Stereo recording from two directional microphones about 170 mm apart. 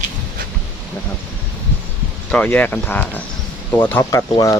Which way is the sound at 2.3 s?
5° left (ahead or behind).